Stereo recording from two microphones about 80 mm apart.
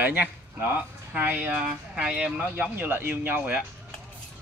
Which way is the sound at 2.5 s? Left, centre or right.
Right.